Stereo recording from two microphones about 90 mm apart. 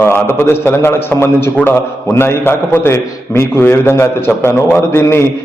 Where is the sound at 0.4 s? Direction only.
25° left (ahead or behind).